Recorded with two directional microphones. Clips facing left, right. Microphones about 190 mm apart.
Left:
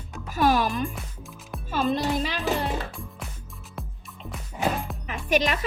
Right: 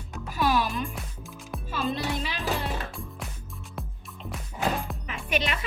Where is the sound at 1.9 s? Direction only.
45° left (ahead or behind).